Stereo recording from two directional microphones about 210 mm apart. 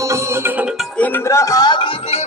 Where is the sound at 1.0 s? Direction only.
10° left (ahead or behind).